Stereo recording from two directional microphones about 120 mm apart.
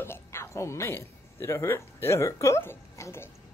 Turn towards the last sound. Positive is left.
turn(degrees=20)  # may be behind; listen again after turning